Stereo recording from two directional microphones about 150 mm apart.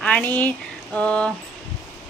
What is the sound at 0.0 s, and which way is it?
Speech, 10° left (ahead or behind).